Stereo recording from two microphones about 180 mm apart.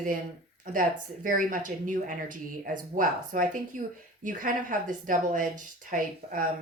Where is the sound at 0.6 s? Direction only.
50° right (ahead or behind).